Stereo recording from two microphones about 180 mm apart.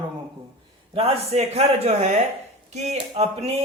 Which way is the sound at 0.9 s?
35° right (ahead or behind).